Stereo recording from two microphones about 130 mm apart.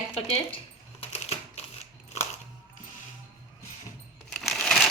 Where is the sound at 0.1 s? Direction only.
50° left (ahead or behind).